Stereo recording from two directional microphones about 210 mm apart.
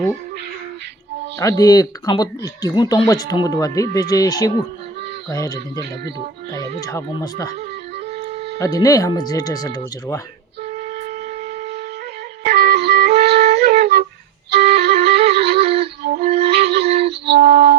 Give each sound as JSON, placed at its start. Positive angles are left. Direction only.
{"t": 1.4, "sound": "speech", "side_deg": 15}
{"t": 8.5, "sound": "speech", "side_deg": 15}
{"t": 12.4, "sound": "music", "side_deg": -50}
{"t": 15.6, "sound": "music", "side_deg": -30}
{"t": 16.6, "sound": "music", "side_deg": -50}